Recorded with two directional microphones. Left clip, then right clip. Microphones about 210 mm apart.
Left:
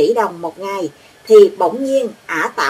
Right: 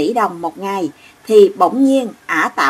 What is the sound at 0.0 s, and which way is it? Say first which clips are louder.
Speech: left 1 dB; 40° right (ahead or behind).